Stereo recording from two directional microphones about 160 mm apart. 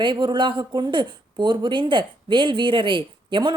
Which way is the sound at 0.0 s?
30° right (ahead or behind).